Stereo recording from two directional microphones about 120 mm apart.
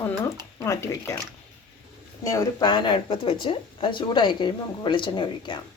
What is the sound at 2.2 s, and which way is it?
Speech, 25° left (ahead or behind).